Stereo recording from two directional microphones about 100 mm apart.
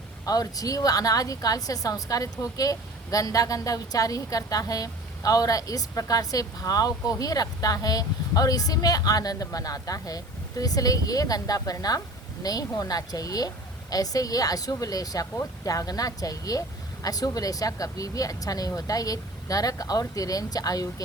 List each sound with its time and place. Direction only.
0.3 s a woman's voice: 40° left (ahead or behind)